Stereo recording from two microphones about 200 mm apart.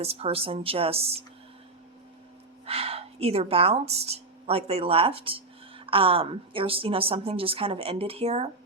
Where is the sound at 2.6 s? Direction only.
30° right (ahead or behind).